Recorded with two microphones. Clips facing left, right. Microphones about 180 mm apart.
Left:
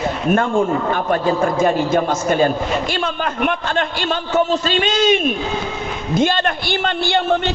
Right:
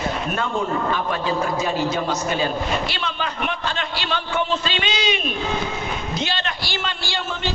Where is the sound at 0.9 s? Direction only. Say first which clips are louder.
Left 5 dB; 50° left (ahead or behind).